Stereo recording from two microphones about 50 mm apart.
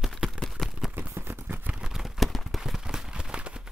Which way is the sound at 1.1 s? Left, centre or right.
Right.